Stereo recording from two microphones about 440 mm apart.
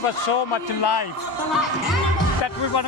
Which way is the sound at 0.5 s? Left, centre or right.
Left.